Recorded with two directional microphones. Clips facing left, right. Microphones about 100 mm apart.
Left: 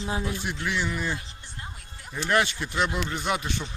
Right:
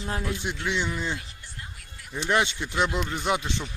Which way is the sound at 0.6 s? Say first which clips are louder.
Even; 20° right (ahead or behind).